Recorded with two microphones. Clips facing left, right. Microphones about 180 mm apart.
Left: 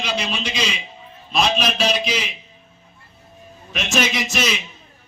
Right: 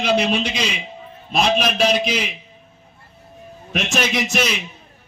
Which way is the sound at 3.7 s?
60° right (ahead or behind).